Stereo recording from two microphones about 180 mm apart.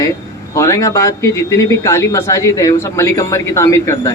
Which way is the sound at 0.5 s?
15° left (ahead or behind).